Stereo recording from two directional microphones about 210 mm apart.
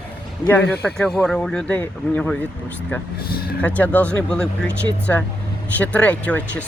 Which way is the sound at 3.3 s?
45° left (ahead or behind).